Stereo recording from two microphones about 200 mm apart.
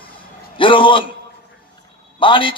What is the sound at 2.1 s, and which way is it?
Speech, 25° left (ahead or behind).